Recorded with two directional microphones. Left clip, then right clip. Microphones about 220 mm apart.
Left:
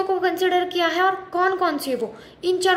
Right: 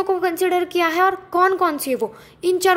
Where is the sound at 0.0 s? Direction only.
40° right (ahead or behind).